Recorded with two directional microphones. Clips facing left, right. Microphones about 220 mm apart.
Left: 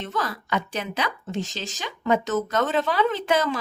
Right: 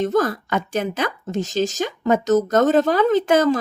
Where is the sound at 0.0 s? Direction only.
45° right (ahead or behind).